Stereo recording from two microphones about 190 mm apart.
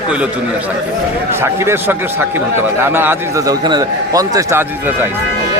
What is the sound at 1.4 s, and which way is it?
A man's voice, 15° right (ahead or behind).